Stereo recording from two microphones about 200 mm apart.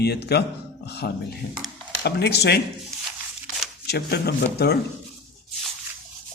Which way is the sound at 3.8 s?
55° left (ahead or behind).